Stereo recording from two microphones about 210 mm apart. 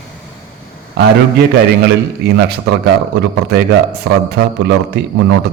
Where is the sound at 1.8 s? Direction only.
50° right (ahead or behind).